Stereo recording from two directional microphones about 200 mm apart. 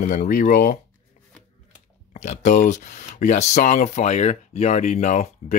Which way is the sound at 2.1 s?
35° left (ahead or behind).